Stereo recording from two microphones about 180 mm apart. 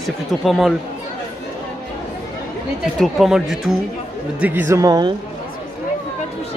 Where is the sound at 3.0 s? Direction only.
Centre (ahead or behind); by 5.1 s 20° right (ahead or behind).